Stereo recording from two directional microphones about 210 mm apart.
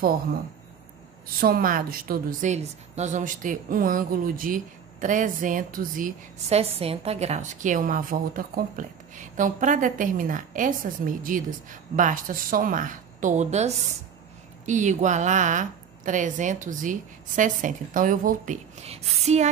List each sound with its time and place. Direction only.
0.0 s speech: 45° right (ahead or behind)
1.4 s a woman's voice: 45° right (ahead or behind)